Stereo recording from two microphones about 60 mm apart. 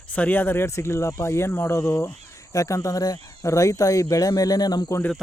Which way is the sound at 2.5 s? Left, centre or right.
Left.